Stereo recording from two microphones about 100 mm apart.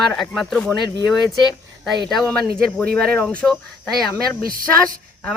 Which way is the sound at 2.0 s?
5° left (ahead or behind).